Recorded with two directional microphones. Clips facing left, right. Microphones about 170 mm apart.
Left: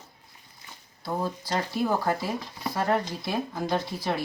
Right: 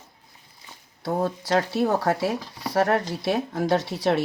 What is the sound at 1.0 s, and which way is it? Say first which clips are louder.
Speech: right 5 dB; 70° right (ahead or behind).